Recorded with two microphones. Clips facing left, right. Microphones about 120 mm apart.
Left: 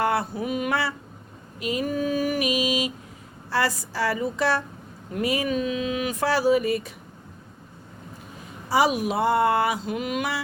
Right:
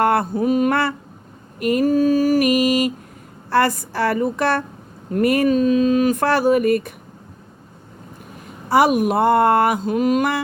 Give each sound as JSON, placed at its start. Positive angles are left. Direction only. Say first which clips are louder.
{"t": 0.0, "sound": "mantra", "louder": "right 7 dB", "side_deg": -55}
{"t": 1.5, "sound": "speech", "louder": "right 9 dB", "side_deg": -55}
{"t": 1.9, "sound": "music", "louder": "right 9 dB", "side_deg": -40}
{"t": 2.4, "sound": "speech", "louder": "right 8 dB", "side_deg": -55}
{"t": 5.5, "sound": "a sound", "louder": "right 10 dB", "side_deg": -40}
{"t": 8.7, "sound": "speech", "louder": "right 6 dB", "side_deg": -55}